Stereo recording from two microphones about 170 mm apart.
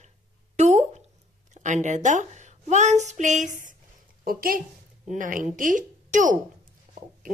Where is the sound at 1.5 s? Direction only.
45° right (ahead or behind).